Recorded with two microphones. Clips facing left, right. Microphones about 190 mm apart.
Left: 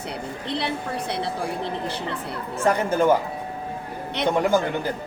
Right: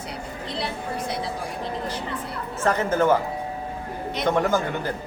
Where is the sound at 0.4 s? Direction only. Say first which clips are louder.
Left 2 dB; 65° left (ahead or behind).